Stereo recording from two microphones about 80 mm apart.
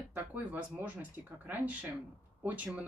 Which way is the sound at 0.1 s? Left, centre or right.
Right.